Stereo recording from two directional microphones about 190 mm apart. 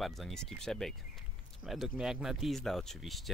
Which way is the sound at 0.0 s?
Centre (ahead or behind).